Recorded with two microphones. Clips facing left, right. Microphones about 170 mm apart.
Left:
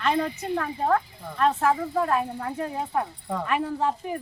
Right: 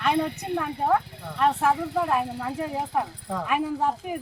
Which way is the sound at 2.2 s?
90° right.